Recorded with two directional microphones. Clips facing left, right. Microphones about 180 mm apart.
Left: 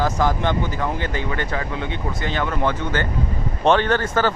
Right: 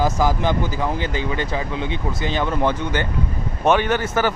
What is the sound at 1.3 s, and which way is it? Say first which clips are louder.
A man's voice: right 1 dB; 20° right (ahead or behind).